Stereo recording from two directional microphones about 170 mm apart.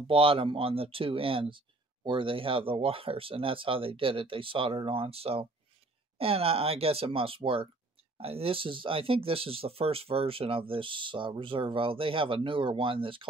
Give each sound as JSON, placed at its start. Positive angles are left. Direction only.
{"t": 0.0, "sound": "speech", "side_deg": -30}